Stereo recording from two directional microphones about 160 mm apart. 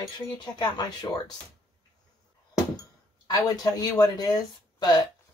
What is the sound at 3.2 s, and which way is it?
Speech, 25° left (ahead or behind).